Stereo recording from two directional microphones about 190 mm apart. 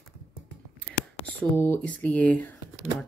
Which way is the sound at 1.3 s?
10° left (ahead or behind).